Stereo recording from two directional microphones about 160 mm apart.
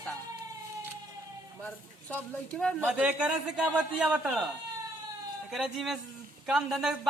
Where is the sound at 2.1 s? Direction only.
5° left (ahead or behind).